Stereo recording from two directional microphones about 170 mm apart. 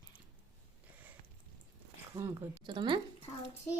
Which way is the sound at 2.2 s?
15° right (ahead or behind).